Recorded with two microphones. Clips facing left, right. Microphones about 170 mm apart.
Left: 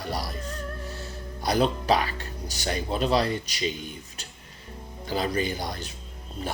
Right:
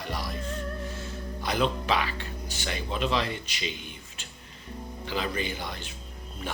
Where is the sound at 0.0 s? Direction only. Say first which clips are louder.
Left 3 dB; 35° left (ahead or behind).